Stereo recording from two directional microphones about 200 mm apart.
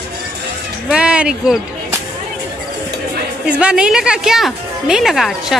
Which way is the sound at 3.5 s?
5° right (ahead or behind).